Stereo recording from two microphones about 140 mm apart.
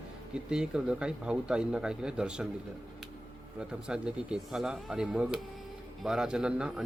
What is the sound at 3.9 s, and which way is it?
A man's voice, 5° right (ahead or behind).